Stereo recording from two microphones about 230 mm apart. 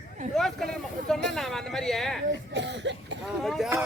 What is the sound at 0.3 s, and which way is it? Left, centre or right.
Speech, centre.